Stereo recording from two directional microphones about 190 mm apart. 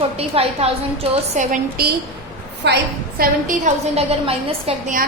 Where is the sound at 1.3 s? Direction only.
40° right (ahead or behind).